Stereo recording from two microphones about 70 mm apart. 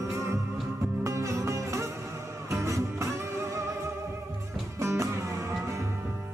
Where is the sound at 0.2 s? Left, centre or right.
Right.